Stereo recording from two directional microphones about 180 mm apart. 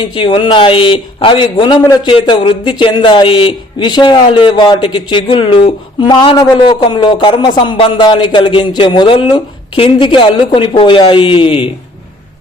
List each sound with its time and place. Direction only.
0.1 s a man's voice: 25° left (ahead or behind)